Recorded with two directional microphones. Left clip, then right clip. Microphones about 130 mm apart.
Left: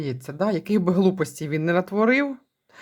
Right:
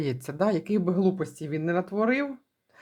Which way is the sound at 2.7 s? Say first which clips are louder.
Left 7 dB; 25° left (ahead or behind).